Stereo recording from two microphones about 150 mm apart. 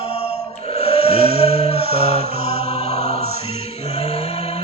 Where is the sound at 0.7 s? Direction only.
40° left (ahead or behind).